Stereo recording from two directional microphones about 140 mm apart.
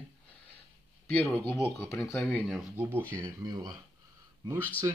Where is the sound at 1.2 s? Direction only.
15° left (ahead or behind).